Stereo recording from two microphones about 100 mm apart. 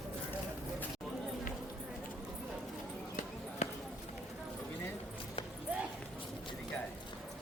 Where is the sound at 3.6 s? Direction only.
90° left.